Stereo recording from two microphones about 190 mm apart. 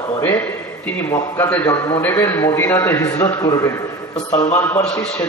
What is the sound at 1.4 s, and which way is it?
A man's voice, 10° left (ahead or behind).